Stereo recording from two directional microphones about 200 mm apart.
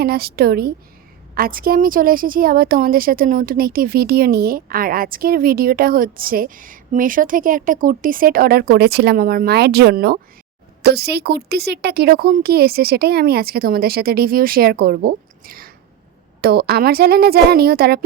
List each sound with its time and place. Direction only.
0.0 s speech: 50° right (ahead or behind)